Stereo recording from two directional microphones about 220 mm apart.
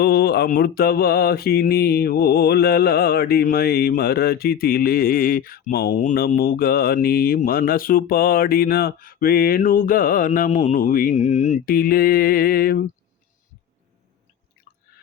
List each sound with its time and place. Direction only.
0.0 s mantra: 45° left (ahead or behind)